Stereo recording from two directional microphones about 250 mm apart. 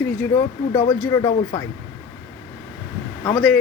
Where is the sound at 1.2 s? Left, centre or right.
Centre.